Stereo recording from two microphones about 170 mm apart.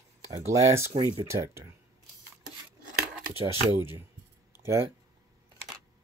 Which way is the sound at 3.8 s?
15° right (ahead or behind).